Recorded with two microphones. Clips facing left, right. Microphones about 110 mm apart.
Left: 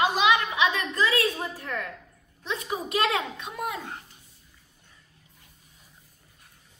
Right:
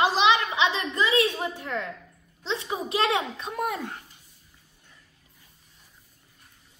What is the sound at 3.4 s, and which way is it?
Speech, 45° right (ahead or behind).